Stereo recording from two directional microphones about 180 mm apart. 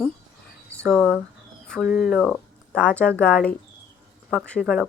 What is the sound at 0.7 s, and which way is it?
Speech, 5° left (ahead or behind).